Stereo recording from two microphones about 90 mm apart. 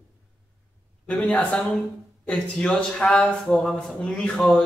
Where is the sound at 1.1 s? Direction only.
10° left (ahead or behind).